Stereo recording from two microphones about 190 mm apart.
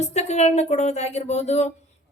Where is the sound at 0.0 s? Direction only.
35° left (ahead or behind).